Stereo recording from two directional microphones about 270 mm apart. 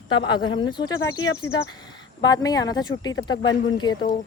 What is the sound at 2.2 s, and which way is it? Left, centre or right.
Speech, centre.